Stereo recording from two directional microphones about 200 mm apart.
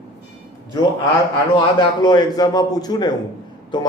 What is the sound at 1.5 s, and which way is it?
A man's voice, 20° left (ahead or behind).